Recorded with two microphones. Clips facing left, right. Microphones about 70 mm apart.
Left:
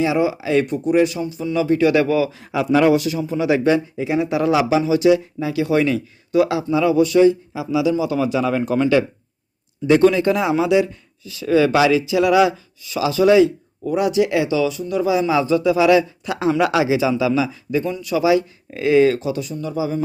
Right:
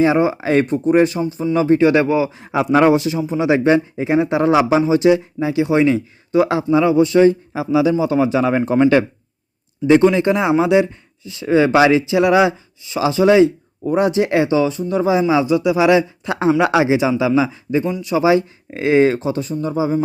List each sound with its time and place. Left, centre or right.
0.0 s a man's voice: right
13.8 s speech: right
15.2 s a man's voice: centre; by 20.0 s right